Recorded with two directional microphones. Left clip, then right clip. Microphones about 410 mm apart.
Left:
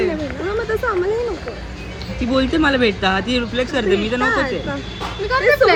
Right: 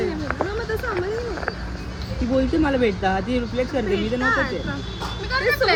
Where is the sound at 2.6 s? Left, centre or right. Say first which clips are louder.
Left 4 dB; left.